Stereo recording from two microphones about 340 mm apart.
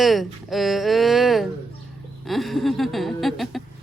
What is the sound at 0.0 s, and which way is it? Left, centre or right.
Speech, centre.